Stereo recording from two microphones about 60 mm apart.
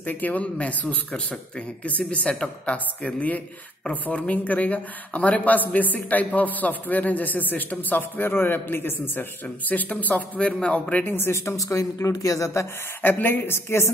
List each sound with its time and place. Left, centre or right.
0.0 s a man's voice: left
9.7 s speech: left
11.1 s speech: left
13.0 s a man's voice: left
13.4 s a woman's voice: left